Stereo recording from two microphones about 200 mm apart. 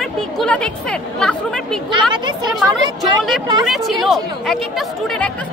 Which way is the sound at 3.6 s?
Centre (ahead or behind).